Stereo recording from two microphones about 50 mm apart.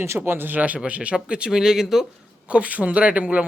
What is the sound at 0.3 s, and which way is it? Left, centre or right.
Speech, right.